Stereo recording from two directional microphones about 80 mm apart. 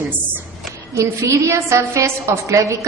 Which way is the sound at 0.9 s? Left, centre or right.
Right.